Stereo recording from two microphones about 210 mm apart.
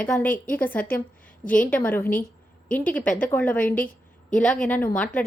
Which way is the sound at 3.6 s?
40° left (ahead or behind).